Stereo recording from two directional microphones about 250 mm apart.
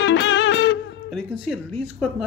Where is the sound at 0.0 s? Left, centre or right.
Left.